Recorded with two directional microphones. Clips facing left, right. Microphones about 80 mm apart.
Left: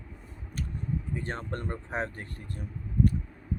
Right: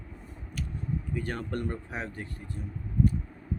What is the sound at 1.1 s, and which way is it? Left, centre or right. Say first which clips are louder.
Speech: right 2 dB; left.